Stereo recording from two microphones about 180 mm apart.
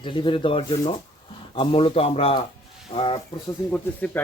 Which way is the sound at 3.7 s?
10° left (ahead or behind).